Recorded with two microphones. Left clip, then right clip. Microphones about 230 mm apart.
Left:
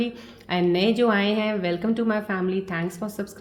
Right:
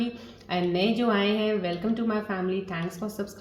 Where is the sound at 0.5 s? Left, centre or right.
Left.